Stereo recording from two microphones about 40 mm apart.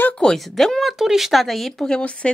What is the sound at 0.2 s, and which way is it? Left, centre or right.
Speech, left.